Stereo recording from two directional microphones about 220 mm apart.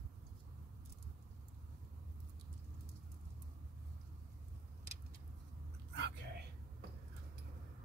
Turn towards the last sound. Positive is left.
turn(degrees=-50)  # may be behind; listen again after turning